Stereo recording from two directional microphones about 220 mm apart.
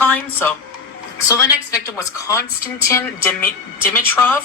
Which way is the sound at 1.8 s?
15° left (ahead or behind).